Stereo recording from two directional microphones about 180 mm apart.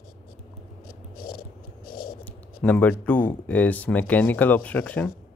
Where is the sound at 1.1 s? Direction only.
55° left (ahead or behind).